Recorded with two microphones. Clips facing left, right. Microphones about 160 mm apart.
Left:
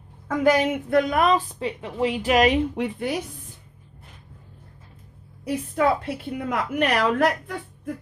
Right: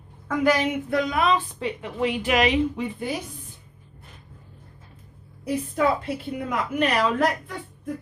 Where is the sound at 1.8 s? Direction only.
30° left (ahead or behind).